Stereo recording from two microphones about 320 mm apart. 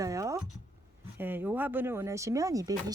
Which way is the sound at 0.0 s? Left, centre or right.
Centre.